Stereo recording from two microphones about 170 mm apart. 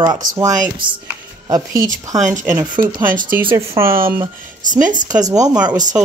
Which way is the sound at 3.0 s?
55° right (ahead or behind).